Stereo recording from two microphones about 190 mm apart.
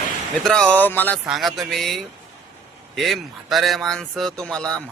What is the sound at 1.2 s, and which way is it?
A man's voice, centre (ahead or behind).